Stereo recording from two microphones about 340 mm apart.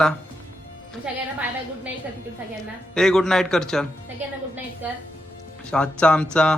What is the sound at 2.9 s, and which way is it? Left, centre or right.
Speech, centre.